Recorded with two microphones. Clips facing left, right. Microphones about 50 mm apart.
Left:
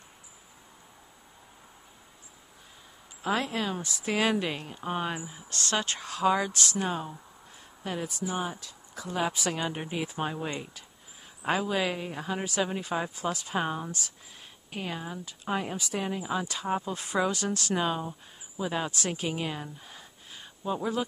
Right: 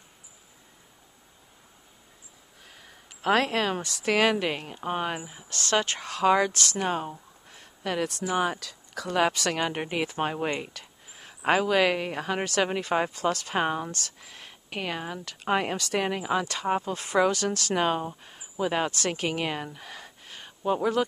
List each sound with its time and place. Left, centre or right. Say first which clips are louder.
2.7 s speech: right 4 dB; right
4.2 s a woman's voice: right 2 dB; right